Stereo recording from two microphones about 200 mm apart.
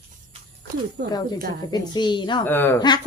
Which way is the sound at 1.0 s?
55° right (ahead or behind).